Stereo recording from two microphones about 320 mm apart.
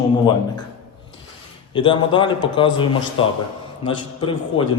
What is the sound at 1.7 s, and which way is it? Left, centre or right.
A man's voice, centre.